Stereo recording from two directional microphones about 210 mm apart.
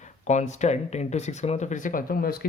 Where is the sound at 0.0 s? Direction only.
35° left (ahead or behind).